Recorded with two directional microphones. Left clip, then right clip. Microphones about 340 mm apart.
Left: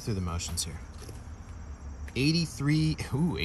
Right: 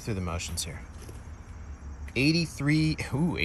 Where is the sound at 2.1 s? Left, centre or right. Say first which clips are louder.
Right 3 dB; centre.